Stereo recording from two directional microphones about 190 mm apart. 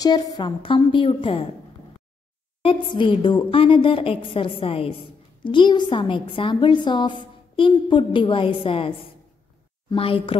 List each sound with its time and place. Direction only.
0.0 s a woman's voice: 20° left (ahead or behind)
2.6 s a woman's voice: 25° left (ahead or behind)